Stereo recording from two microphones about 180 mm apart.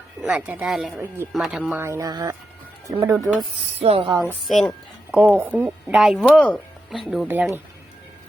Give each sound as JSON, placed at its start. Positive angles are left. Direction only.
{"t": 0.2, "sound": "speech", "side_deg": -5}
{"t": 1.8, "sound": "speech", "side_deg": -15}
{"t": 3.8, "sound": "speech", "side_deg": -30}
{"t": 4.4, "sound": "speech", "side_deg": 0}
{"t": 5.1, "sound": "speech", "side_deg": -10}